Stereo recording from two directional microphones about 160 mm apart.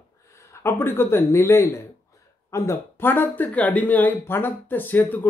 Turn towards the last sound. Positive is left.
turn(degrees=10)  # may be behind; listen again after turning